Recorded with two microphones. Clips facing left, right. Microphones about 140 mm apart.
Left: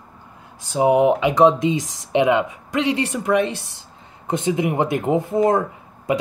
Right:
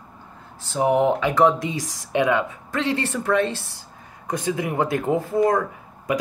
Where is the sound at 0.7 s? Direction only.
15° left (ahead or behind).